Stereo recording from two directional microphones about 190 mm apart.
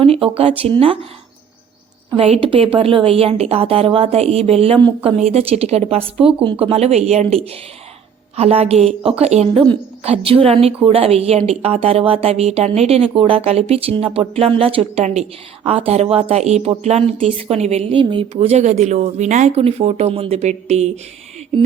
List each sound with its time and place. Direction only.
0.0 s speech: 30° right (ahead or behind)
2.1 s a woman's voice: 30° right (ahead or behind)